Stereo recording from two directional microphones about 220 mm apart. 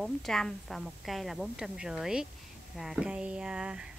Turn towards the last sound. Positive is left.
turn(degrees=-5)  # may be behind; listen again after turning